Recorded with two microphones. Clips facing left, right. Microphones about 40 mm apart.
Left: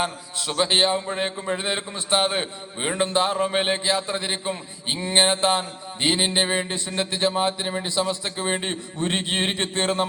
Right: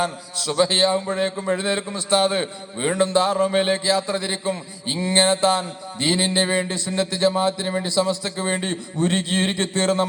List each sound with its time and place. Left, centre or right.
0.0 s a man's voice: left